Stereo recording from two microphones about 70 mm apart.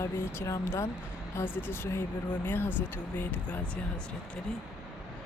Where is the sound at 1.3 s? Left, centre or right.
Left.